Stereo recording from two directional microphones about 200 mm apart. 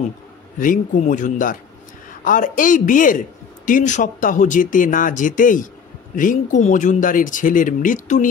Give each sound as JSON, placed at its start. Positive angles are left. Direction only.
{"t": 0.6, "sound": "speech", "side_deg": 40}